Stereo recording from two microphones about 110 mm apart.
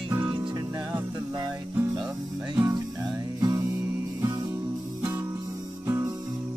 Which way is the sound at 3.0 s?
35° right (ahead or behind).